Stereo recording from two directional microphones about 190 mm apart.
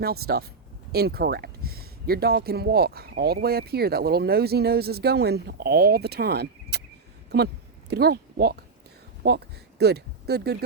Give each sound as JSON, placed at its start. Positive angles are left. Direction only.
{"t": 0.0, "sound": "speech", "side_deg": -55}
{"t": 7.3, "sound": "a sound", "side_deg": -60}
{"t": 9.2, "sound": "speech", "side_deg": -60}